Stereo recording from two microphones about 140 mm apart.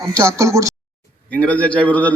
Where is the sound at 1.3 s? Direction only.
10° left (ahead or behind).